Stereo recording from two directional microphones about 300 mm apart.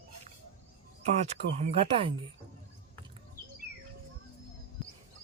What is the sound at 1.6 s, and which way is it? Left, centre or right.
Speech, right.